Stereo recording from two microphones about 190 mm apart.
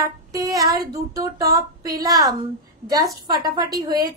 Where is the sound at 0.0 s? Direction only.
20° right (ahead or behind).